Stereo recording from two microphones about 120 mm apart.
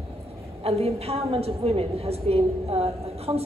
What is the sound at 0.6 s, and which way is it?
A woman's voice, 55° right (ahead or behind).